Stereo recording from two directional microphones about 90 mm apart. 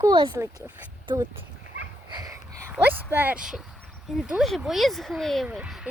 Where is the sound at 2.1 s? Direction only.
45° right (ahead or behind).